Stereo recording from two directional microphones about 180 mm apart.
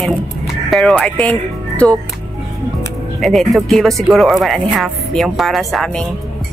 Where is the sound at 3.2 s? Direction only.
Centre (ahead or behind).